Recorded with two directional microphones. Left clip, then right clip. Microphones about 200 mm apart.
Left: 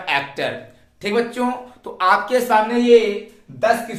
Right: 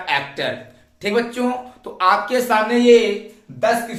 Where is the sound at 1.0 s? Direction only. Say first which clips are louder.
Even; 5° left (ahead or behind).